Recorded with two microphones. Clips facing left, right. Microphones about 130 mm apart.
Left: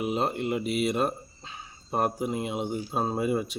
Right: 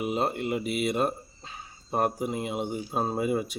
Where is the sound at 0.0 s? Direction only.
Centre (ahead or behind).